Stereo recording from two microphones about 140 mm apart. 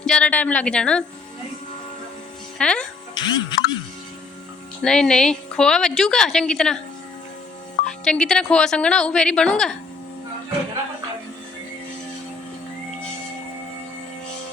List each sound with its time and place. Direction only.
0.0 s a woman's voice: 5° left (ahead or behind)
2.6 s speech: 5° left (ahead or behind)
3.2 s speech: 30° left (ahead or behind)
4.8 s a woman's voice: 5° left (ahead or behind)
7.9 s a woman's voice: 5° left (ahead or behind)